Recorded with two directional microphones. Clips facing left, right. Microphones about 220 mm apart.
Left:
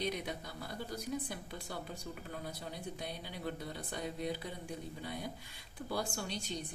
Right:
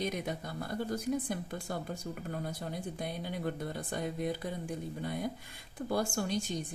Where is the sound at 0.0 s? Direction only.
50° right (ahead or behind).